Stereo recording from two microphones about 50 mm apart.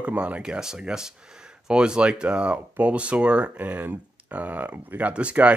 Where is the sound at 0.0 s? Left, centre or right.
Right.